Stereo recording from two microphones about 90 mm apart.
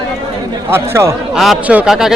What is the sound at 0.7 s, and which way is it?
Speech, 30° right (ahead or behind).